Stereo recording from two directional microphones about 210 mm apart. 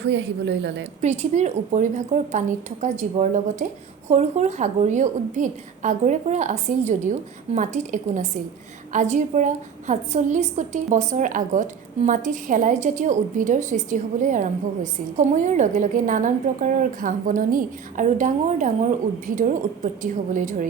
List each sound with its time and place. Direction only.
0.0 s a woman's voice: 55° right (ahead or behind)
1.0 s a woman's voice: 35° right (ahead or behind)